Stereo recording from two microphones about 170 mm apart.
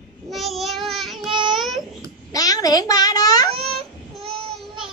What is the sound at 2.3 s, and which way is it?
A child's voice, 20° left (ahead or behind).